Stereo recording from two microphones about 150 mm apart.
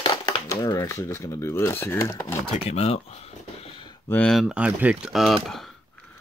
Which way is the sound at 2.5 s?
45° left (ahead or behind).